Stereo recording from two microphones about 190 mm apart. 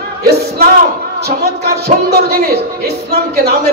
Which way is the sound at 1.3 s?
55° right (ahead or behind).